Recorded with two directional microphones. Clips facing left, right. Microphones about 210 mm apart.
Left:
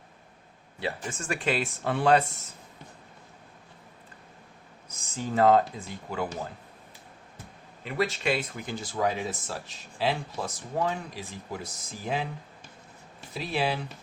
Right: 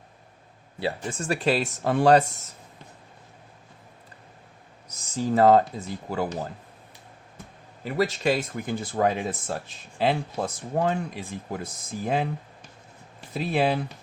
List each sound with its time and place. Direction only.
0.8 s speech: 35° right (ahead or behind)
5.1 s speech: 40° right (ahead or behind)
7.9 s speech: 40° right (ahead or behind)
13.3 s speech: 50° right (ahead or behind)